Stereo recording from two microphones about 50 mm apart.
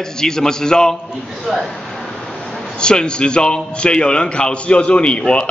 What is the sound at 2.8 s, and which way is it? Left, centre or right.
A man's voice, centre.